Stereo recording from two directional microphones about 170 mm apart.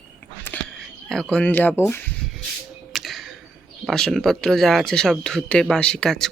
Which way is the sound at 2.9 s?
Centre (ahead or behind).